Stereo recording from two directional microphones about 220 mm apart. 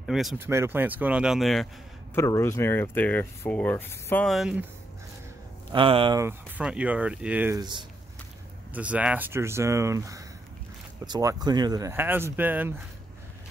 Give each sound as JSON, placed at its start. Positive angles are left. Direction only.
{"t": 0.0, "sound": "speech", "side_deg": 0}
{"t": 2.1, "sound": "speech", "side_deg": 15}
{"t": 5.7, "sound": "speech", "side_deg": -25}
{"t": 6.6, "sound": "speech", "side_deg": -5}
{"t": 8.7, "sound": "speech", "side_deg": -5}